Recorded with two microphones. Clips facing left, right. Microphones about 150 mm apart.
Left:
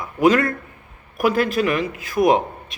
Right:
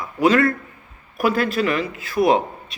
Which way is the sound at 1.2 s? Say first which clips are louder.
Left 1 dB; 15° left (ahead or behind).